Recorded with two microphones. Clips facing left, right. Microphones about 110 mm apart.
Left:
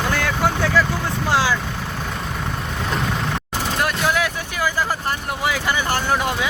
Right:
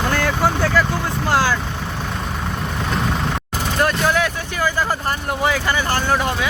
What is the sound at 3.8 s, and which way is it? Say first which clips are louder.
Vehicle: right 3 dB; 5° left (ahead or behind).